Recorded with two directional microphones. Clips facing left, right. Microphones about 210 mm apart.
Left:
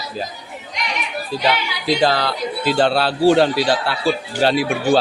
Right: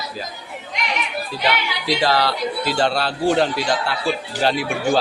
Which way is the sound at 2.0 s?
50° left (ahead or behind).